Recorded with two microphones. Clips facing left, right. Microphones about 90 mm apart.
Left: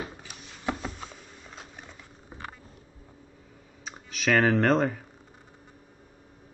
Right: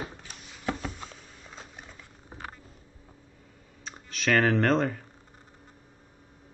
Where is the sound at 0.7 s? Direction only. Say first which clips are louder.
Even; 5° left (ahead or behind).